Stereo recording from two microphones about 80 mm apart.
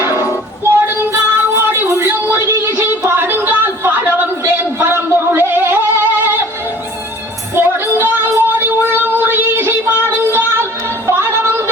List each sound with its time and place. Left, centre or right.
0.6 s child singing: right
1.1 s music: right
7.5 s music: right